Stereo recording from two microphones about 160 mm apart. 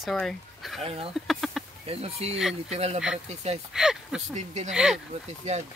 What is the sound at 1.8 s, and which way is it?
Speech, 40° right (ahead or behind).